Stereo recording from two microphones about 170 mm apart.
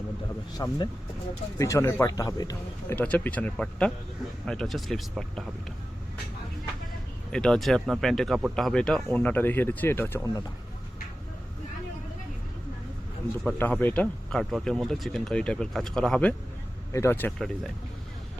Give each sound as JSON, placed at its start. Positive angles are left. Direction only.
{"t": 0.5, "sound": "speech", "side_deg": 25}
{"t": 2.9, "sound": "speech", "side_deg": 10}
{"t": 7.3, "sound": "speech", "side_deg": 5}
{"t": 13.4, "sound": "speech", "side_deg": 5}
{"t": 17.3, "sound": "speech", "side_deg": 0}